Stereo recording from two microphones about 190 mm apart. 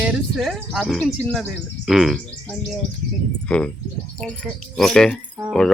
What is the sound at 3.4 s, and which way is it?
Speech, 5° left (ahead or behind).